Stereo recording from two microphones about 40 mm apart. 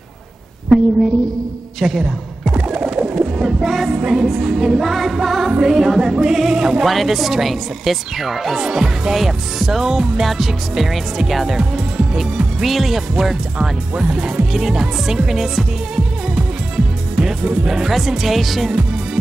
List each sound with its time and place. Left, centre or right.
1.8 s speech: centre
2.7 s bird: right
3.2 s a sound: centre
3.6 s speech: centre
6.8 s speech: centre
8.5 s speech: centre
11.5 s music: centre
12.6 s speech: centre
16.7 s music: centre
17.6 s speech: centre